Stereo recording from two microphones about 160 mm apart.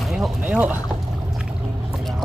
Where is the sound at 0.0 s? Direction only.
Centre (ahead or behind).